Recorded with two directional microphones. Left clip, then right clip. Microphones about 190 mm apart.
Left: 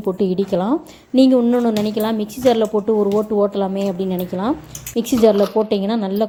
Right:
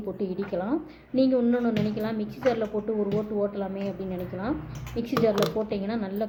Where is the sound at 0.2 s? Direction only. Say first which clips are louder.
Left 10 dB; 45° left (ahead or behind).